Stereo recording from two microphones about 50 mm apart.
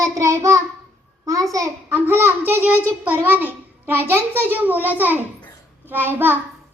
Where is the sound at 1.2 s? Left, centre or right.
Right.